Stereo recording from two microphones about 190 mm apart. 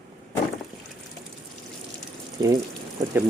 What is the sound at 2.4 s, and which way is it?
Speech, 25° right (ahead or behind).